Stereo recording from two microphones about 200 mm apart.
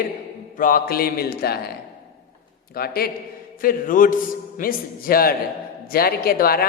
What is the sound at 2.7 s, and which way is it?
A woman's voice, 50° left (ahead or behind).